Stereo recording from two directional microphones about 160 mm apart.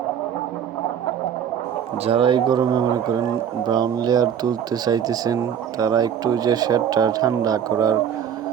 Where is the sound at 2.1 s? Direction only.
35° right (ahead or behind).